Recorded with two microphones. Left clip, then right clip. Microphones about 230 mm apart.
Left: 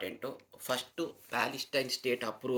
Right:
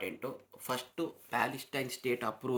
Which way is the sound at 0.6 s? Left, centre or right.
Right.